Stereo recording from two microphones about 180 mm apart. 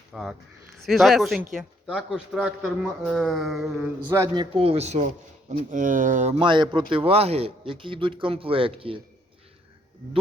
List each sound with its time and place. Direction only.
0.1 s speech: centre (ahead or behind)
4.1 s a man's voice: 15° right (ahead or behind)
4.5 s speech: 35° right (ahead or behind)
6.4 s a man's voice: 25° right (ahead or behind)